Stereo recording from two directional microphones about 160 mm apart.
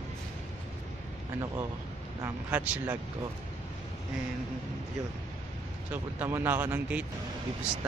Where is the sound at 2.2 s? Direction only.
10° right (ahead or behind).